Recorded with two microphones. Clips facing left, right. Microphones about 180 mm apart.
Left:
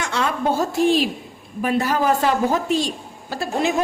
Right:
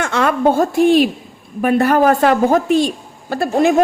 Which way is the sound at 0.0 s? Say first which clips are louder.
Right 7 dB; 60° right (ahead or behind).